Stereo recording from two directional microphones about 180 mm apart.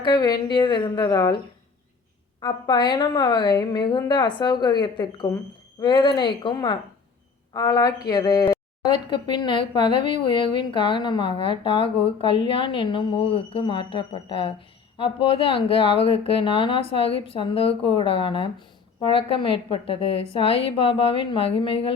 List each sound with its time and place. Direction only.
0.0 s speech: 25° left (ahead or behind)
2.4 s speech: 25° left (ahead or behind)